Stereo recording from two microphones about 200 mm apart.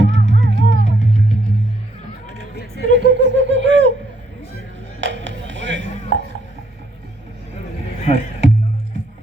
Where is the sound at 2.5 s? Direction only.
55° left (ahead or behind).